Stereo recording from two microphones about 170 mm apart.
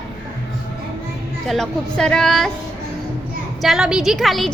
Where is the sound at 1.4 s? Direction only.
Centre (ahead or behind).